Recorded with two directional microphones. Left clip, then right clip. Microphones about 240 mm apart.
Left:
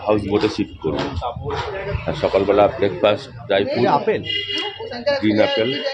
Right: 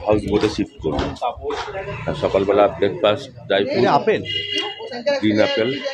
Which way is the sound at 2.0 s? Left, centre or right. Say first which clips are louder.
Left 1 dB; centre.